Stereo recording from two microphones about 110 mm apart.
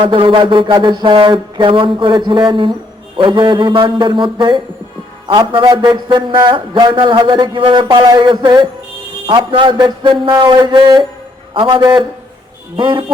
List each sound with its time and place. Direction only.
0.0 s a man's voice: 50° right (ahead or behind)